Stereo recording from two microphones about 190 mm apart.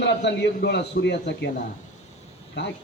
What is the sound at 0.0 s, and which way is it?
A man's voice, 65° left (ahead or behind).